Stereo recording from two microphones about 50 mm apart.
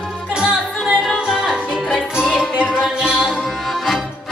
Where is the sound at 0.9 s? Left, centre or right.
Centre.